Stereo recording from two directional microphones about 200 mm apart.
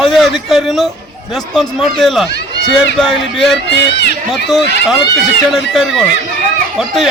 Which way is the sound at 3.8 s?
60° left (ahead or behind).